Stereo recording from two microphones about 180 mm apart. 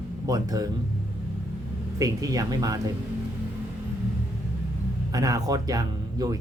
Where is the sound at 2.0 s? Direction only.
20° right (ahead or behind).